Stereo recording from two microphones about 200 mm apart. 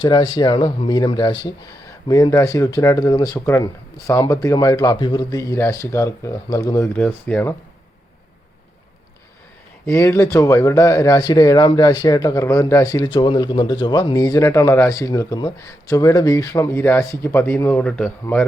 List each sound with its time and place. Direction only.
0.0 s speech: 25° left (ahead or behind); by 7.5 s 5° left (ahead or behind)
9.8 s speech: 15° left (ahead or behind)